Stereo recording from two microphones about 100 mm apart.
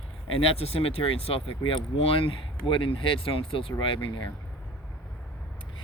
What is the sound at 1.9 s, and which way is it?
Speech, 70° left (ahead or behind).